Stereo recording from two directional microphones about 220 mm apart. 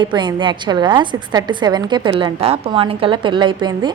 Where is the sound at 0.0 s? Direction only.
20° right (ahead or behind).